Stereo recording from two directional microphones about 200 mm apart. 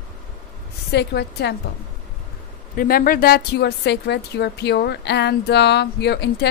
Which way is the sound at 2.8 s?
45° left (ahead or behind).